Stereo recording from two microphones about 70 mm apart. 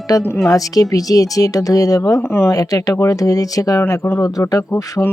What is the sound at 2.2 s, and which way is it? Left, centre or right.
Speech, left.